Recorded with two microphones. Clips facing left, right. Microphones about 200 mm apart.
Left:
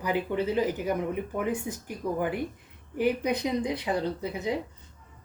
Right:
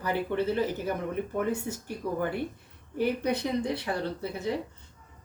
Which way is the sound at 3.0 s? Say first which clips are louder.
Left 1 dB; 15° left (ahead or behind).